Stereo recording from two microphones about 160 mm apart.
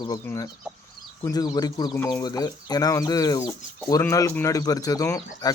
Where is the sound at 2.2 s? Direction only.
25° left (ahead or behind).